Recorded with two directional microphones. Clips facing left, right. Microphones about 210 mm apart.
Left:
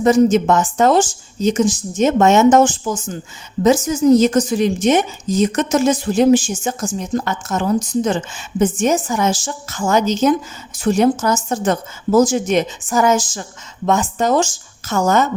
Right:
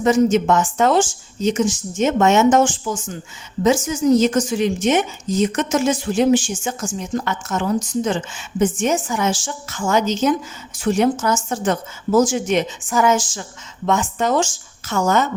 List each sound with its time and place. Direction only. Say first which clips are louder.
0.0 s a woman's voice: left 3 dB; 35° left (ahead or behind)